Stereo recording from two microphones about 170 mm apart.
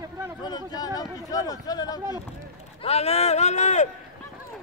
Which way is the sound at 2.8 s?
40° left (ahead or behind).